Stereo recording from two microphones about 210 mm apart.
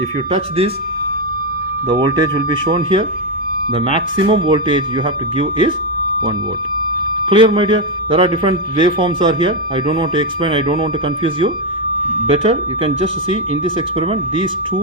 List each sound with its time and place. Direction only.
0.3 s a man's voice: 25° right (ahead or behind)
1.9 s a man's voice: 20° right (ahead or behind)
7.3 s a man's voice: 25° right (ahead or behind)